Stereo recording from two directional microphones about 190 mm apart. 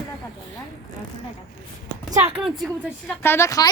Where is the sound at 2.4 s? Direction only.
5° right (ahead or behind).